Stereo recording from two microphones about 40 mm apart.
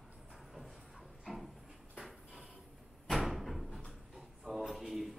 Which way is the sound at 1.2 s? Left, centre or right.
Centre.